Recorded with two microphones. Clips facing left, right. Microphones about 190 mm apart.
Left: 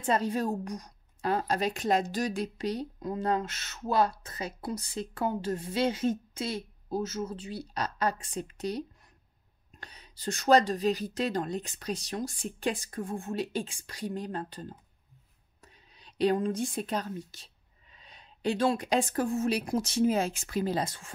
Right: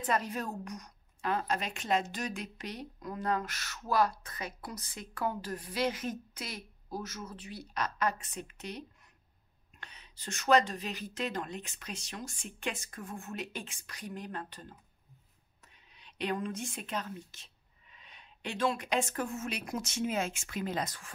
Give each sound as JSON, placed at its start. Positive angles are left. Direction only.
{"t": 0.0, "sound": "a woman's voice", "side_deg": 30}